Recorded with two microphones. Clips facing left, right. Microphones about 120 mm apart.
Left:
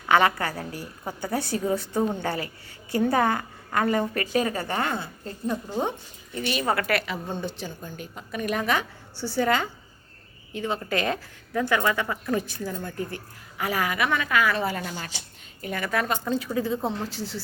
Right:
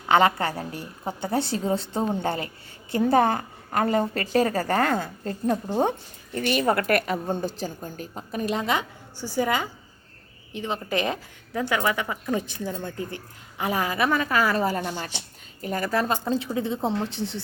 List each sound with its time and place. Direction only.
0.0 s a woman's voice: 25° right (ahead or behind)
4.3 s a woman's voice: 40° right (ahead or behind); by 17.4 s 25° right (ahead or behind)